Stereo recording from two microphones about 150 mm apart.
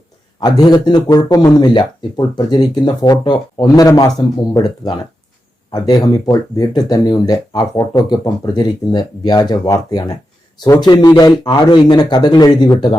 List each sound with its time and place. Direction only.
0.3 s speech: 25° left (ahead or behind)
5.7 s speech: 25° left (ahead or behind)